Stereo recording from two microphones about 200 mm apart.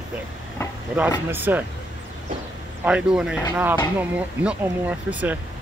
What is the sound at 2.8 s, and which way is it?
Speech, 5° right (ahead or behind).